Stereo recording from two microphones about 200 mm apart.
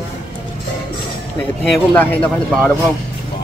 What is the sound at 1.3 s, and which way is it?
Speech, 10° left (ahead or behind).